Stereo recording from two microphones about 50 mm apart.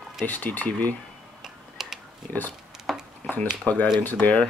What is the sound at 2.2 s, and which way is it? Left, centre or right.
Speech, left.